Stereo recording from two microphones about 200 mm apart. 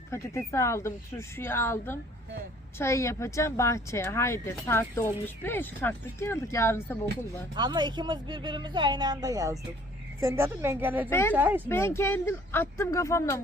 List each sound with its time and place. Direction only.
0.1 s speech: 15° left (ahead or behind)
7.5 s a woman's voice: 20° right (ahead or behind)
11.1 s speech: 10° left (ahead or behind)
11.3 s a woman's voice: 10° right (ahead or behind)
11.7 s speech: 10° left (ahead or behind)